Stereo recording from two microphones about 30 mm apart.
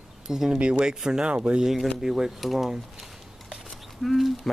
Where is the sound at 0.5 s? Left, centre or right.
Right.